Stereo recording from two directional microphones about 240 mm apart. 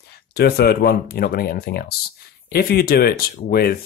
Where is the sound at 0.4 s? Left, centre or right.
Left.